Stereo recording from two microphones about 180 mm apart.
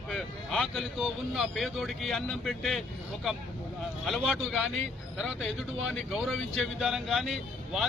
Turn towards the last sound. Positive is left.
turn(degrees=0)  # may be behind; listen again after turning